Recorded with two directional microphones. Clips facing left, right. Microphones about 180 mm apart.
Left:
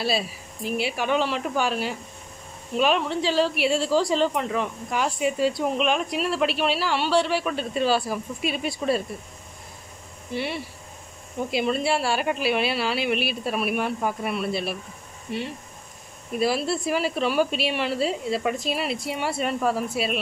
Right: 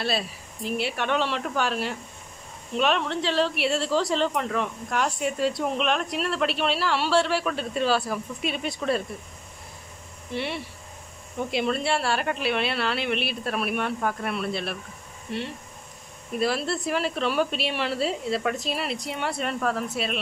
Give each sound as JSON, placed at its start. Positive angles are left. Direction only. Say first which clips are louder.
{"t": 0.7, "sound": "speech", "louder": "left 2 dB", "side_deg": 0}
{"t": 10.3, "sound": "speech", "louder": "left 1 dB", "side_deg": 0}